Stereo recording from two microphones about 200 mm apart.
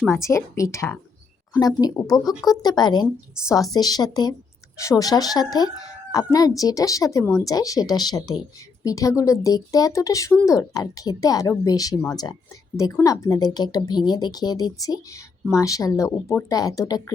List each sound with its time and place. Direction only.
0.0 s a woman's voice: 15° left (ahead or behind)